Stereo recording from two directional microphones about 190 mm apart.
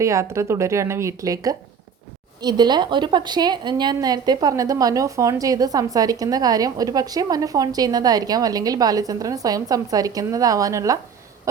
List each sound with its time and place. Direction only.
0.0 s a woman's voice: 15° right (ahead or behind)